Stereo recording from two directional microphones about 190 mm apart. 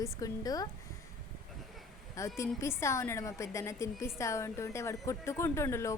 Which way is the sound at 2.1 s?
15° left (ahead or behind).